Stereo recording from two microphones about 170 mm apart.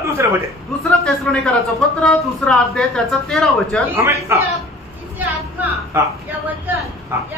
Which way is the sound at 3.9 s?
15° right (ahead or behind).